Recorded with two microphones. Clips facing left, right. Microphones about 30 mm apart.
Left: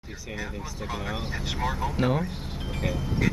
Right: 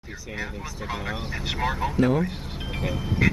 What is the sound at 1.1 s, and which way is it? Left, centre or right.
Speech, centre.